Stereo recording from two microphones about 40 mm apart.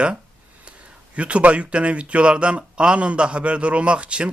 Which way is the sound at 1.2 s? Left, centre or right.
Right.